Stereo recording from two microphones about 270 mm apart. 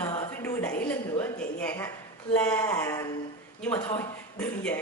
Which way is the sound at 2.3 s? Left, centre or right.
Centre.